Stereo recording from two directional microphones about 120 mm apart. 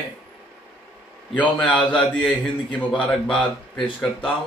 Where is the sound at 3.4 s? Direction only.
45° left (ahead or behind).